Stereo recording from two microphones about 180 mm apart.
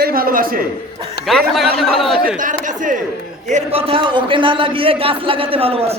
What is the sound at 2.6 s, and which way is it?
A man's voice, 45° right (ahead or behind).